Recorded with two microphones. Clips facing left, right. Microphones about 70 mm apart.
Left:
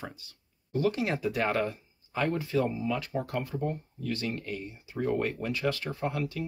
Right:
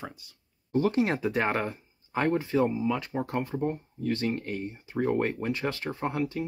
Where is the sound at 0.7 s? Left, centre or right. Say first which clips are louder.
Right 3 dB; right.